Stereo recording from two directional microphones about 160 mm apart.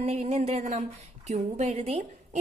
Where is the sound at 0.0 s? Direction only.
40° right (ahead or behind).